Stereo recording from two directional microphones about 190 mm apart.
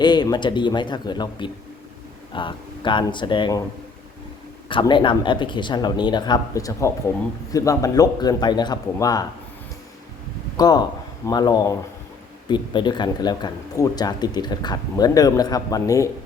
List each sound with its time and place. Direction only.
0.0 s speech: 20° left (ahead or behind)
4.7 s speech: 25° left (ahead or behind)
10.6 s speech: 20° left (ahead or behind)